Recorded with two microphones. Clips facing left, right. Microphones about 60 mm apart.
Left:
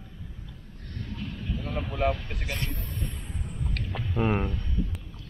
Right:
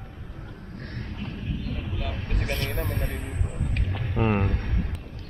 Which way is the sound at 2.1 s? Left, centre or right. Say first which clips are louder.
Left 5 dB; right.